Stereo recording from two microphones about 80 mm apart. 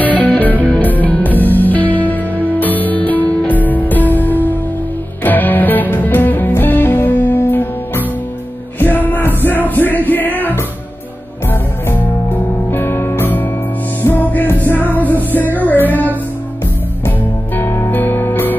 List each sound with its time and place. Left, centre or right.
0.0 s music: centre
11.9 s music: left
17.6 s music: left